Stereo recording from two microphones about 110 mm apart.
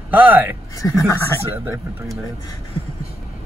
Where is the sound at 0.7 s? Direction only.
30° left (ahead or behind).